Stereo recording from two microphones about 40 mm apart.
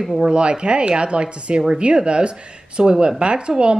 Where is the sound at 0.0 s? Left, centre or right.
Centre.